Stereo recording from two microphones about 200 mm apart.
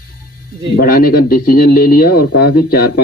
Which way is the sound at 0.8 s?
45° left (ahead or behind).